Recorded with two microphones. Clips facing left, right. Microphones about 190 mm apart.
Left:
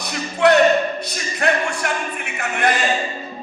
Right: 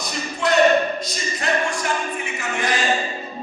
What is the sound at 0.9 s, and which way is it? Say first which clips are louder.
A capella: left 1 dB; 60° left (ahead or behind).